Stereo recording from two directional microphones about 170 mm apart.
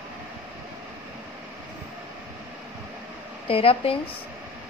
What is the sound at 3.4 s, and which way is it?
Speech, 35° left (ahead or behind).